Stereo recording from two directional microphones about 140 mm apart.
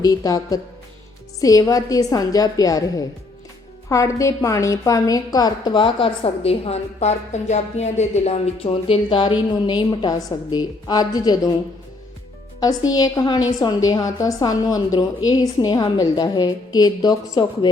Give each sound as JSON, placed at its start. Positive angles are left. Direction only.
{"t": 0.0, "sound": "a woman's voice", "side_deg": 25}
{"t": 12.9, "sound": "a woman's voice", "side_deg": 30}